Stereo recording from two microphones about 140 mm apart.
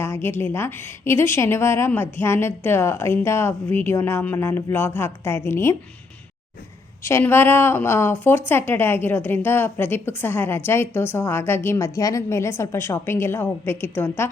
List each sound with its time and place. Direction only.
0.0 s speech: 15° left (ahead or behind)
7.0 s speech: 15° left (ahead or behind)